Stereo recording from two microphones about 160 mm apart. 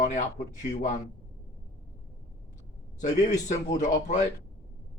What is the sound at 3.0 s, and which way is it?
A man's voice, 50° left (ahead or behind).